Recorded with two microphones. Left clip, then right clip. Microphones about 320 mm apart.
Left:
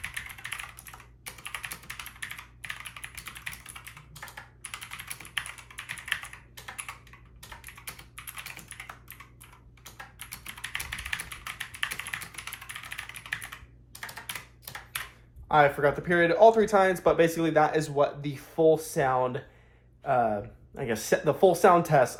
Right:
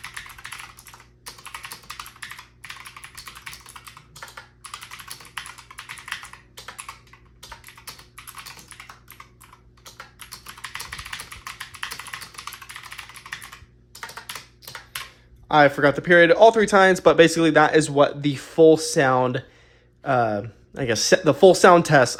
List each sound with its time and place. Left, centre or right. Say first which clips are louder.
15.4 s a man's voice: right 6 dB; right